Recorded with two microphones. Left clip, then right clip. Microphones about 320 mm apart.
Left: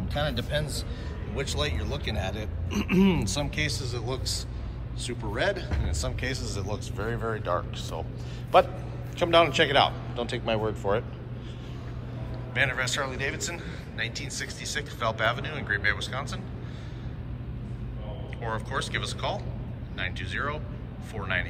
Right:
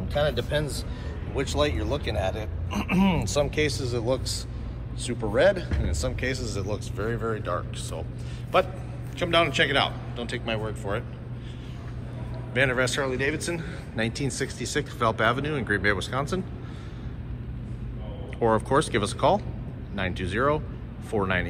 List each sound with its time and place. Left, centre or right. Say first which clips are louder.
0.1 s speech: right 4 dB; centre
12.5 s speech: right 3 dB; centre
18.4 s speech: right 10 dB; centre